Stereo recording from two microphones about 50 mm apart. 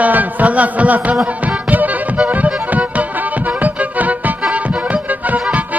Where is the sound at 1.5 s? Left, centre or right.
Right.